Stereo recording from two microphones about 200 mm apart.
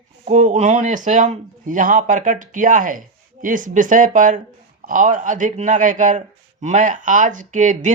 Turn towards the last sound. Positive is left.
turn(degrees=-40)  # may be behind; listen again after turning